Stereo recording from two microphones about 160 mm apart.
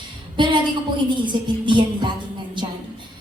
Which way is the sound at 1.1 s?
30° right (ahead or behind).